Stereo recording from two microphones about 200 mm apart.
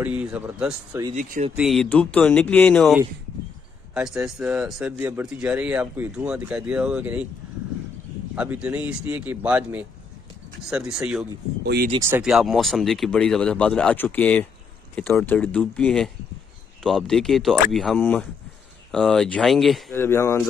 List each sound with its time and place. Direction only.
0.0 s speech: 5° right (ahead or behind)
1.1 s speech: 40° right (ahead or behind)
1.6 s speech: centre (ahead or behind)
8.4 s speech: 10° right (ahead or behind)
11.6 s speech: 55° right (ahead or behind)
12.0 s speech: 5° right (ahead or behind)
19.9 s speech: 10° left (ahead or behind)